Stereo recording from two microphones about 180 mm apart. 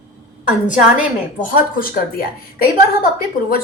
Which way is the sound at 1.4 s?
50° left (ahead or behind).